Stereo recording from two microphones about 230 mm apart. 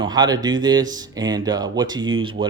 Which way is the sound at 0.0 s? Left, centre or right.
Centre.